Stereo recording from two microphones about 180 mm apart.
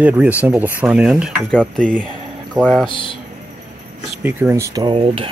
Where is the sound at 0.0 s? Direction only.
10° right (ahead or behind).